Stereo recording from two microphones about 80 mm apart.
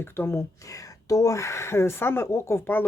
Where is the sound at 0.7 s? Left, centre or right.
Left.